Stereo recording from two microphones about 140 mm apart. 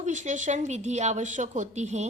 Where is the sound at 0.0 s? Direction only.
60° right (ahead or behind).